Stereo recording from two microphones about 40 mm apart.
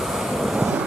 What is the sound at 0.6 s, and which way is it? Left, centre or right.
Vehicle, right.